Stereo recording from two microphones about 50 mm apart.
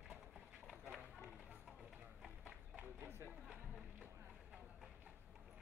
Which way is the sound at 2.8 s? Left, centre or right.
Right.